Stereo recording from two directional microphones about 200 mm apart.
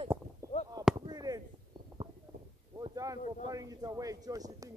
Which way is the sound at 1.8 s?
25° right (ahead or behind).